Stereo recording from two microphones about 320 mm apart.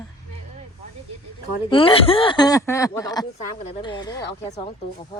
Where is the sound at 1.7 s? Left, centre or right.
Centre.